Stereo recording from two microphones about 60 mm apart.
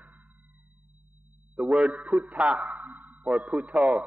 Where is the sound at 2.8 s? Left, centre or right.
Right.